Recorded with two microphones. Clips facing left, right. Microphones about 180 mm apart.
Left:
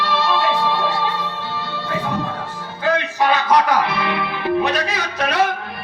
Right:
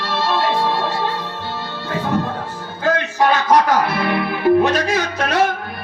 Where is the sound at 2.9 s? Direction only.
45° right (ahead or behind).